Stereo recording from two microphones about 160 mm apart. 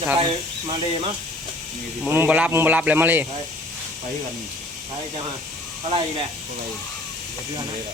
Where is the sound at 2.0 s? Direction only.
15° right (ahead or behind).